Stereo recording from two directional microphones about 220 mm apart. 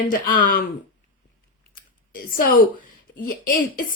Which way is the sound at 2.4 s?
40° left (ahead or behind).